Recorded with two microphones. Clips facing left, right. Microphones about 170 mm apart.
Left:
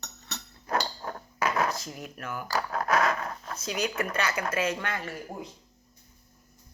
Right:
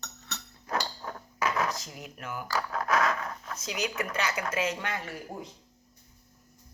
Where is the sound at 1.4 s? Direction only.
65° left (ahead or behind).